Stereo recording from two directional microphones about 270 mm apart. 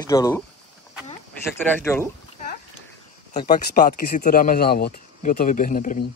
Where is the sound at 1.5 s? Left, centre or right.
Centre.